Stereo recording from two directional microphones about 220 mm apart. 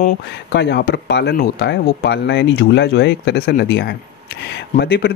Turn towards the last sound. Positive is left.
turn(degrees=45)  # may be behind; listen again after turning